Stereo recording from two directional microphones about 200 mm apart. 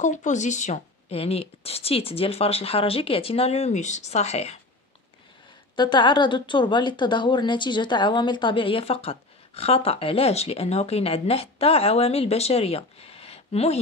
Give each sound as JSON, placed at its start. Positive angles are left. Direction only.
{"t": 0.0, "sound": "a woman's voice", "side_deg": 40}
{"t": 5.8, "sound": "a woman's voice", "side_deg": 25}